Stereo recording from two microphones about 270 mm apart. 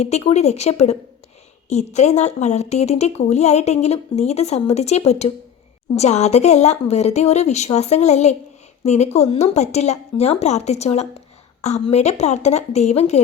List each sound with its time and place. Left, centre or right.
0.0 s speech: left